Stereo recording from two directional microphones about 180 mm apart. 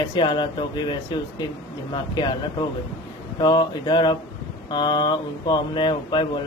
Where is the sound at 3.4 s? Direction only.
25° left (ahead or behind).